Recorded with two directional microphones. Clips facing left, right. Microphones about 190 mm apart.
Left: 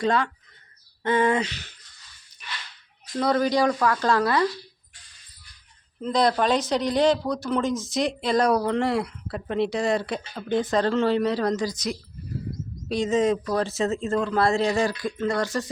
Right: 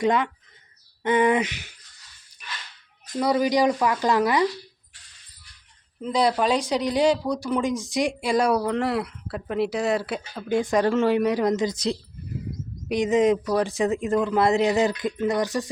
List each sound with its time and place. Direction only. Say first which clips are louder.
0.0 s speech: right 1 dB; 20° right (ahead or behind)
3.2 s speech: right 1 dB; 10° right (ahead or behind)
6.0 s speech: even; 10° right (ahead or behind); by 11.9 s 25° right (ahead or behind)
12.9 s speech: right 2 dB; 15° right (ahead or behind)